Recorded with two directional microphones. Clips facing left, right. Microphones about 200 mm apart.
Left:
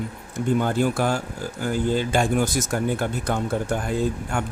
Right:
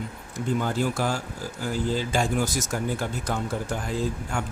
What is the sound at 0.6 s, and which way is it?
Speech, 55° left (ahead or behind).